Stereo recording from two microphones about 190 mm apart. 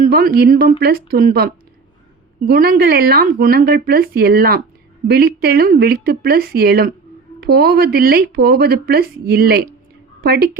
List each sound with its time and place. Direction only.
0.0 s a woman's voice: 50° right (ahead or behind)